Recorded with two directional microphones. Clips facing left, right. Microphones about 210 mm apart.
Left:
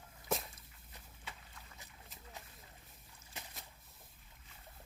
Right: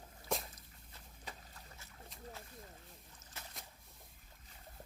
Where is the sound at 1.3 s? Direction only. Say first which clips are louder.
Right 2 dB; 40° right (ahead or behind).